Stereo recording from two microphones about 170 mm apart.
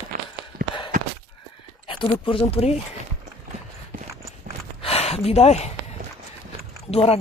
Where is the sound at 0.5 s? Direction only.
55° right (ahead or behind).